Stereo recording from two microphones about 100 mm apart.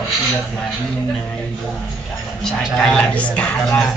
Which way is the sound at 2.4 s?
5° left (ahead or behind).